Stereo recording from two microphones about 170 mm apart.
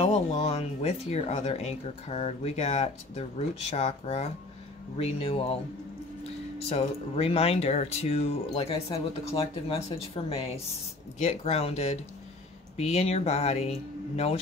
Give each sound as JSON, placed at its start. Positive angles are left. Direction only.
{"t": 0.0, "sound": "speech", "side_deg": 40}
{"t": 6.7, "sound": "speech", "side_deg": 35}